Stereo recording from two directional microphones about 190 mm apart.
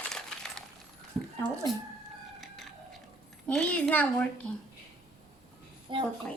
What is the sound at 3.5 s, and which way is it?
Speech, 5° left (ahead or behind).